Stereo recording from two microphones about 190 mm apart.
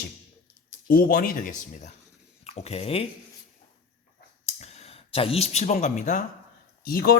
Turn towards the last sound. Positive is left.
turn(degrees=50)  # may be behind; listen again after turning